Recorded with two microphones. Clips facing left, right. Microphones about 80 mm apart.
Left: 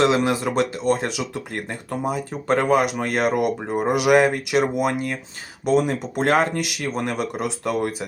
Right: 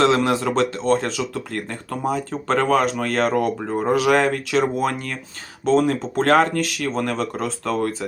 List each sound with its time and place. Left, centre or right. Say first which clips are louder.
0.0 s speech: right 1 dB; centre